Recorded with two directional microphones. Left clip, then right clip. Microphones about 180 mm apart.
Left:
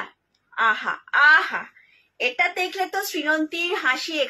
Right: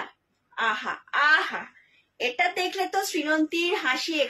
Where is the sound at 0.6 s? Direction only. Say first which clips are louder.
Left 5 dB; 15° right (ahead or behind).